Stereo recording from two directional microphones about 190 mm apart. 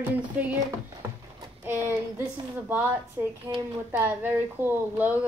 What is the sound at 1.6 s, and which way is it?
Speech, 10° right (ahead or behind).